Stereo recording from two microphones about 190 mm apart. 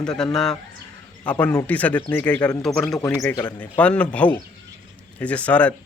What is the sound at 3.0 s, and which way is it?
Speech, 15° left (ahead or behind).